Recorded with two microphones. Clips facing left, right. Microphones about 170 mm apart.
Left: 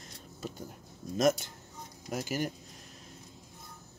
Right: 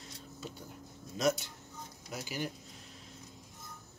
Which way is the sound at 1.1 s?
45° left (ahead or behind).